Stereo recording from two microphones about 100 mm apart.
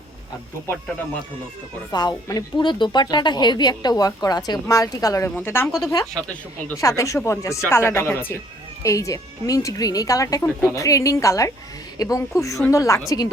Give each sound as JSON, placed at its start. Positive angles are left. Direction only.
{"t": 1.9, "sound": "speech", "side_deg": 45}
{"t": 5.4, "sound": "speech", "side_deg": 20}
{"t": 5.6, "sound": "speech", "side_deg": 5}
{"t": 6.8, "sound": "speech", "side_deg": 30}
{"t": 8.8, "sound": "speech", "side_deg": 35}